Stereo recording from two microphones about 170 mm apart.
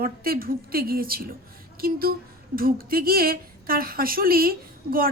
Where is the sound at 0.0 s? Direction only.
60° right (ahead or behind).